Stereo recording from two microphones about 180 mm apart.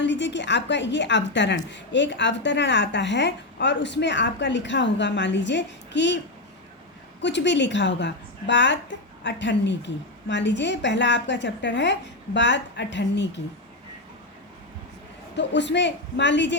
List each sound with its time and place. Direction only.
0.0 s a woman's voice: 80° left
7.2 s a woman's voice: 75° left (ahead or behind)
15.4 s a woman's voice: 80° left